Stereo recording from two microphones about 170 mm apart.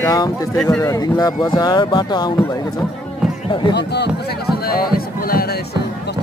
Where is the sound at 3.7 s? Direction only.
80° left.